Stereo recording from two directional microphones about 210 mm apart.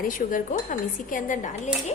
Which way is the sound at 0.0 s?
40° left (ahead or behind).